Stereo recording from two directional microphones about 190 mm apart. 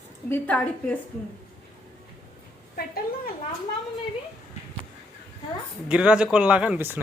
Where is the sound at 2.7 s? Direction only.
50° left (ahead or behind).